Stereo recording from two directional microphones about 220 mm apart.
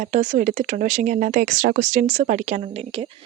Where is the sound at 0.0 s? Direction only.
35° right (ahead or behind).